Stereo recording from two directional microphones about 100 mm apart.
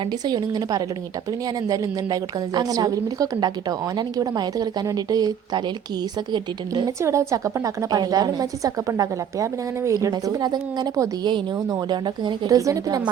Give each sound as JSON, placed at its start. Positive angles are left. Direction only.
{"t": 0.0, "sound": "a woman's voice", "side_deg": -45}
{"t": 7.0, "sound": "a woman's voice", "side_deg": -30}
{"t": 12.5, "sound": "a woman's voice", "side_deg": -35}